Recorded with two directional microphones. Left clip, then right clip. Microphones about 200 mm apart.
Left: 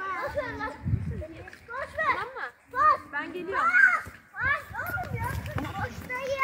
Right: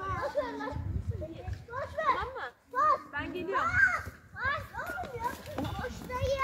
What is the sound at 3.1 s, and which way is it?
Children playing, 45° left (ahead or behind).